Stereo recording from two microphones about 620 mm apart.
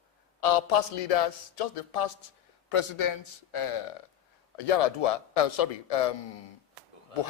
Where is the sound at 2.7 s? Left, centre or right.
Left.